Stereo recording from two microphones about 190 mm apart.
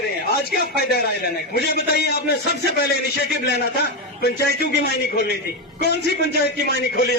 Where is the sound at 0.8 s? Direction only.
55° left (ahead or behind).